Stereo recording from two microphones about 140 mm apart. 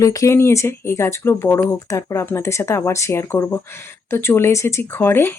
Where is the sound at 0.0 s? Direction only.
25° left (ahead or behind).